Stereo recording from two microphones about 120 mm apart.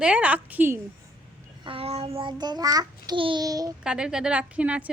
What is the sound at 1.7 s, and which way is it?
Speech, 55° right (ahead or behind).